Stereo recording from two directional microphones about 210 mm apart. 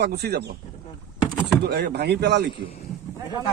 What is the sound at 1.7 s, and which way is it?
Speech, 50° right (ahead or behind).